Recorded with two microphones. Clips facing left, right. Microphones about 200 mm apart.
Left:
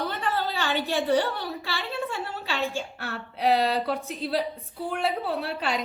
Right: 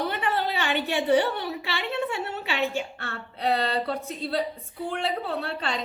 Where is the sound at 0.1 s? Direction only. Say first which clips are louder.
Right 1 dB; 20° right (ahead or behind).